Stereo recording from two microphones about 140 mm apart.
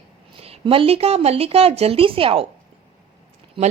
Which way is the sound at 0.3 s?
45° right (ahead or behind).